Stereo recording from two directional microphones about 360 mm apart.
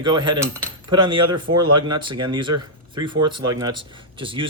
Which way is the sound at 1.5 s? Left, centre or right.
Right.